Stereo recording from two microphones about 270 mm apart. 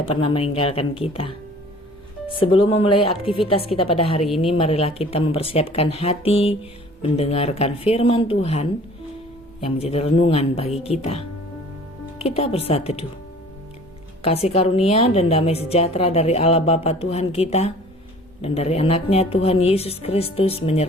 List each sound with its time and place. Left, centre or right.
0.1 s a woman's voice: left
12.2 s a woman's voice: left
14.2 s a woman's voice: left